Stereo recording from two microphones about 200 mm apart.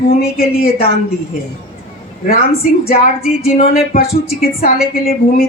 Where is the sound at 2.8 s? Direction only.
50° left (ahead or behind).